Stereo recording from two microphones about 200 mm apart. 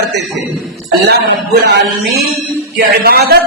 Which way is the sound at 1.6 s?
55° right (ahead or behind).